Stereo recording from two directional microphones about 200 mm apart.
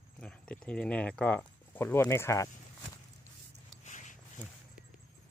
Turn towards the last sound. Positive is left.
turn(degrees=-5)  # may be behind; listen again after turning